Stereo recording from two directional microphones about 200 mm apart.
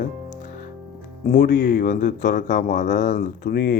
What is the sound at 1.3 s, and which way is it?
Speech, 55° left (ahead or behind).